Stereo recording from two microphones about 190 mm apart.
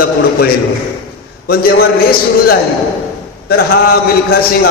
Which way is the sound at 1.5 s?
55° left (ahead or behind).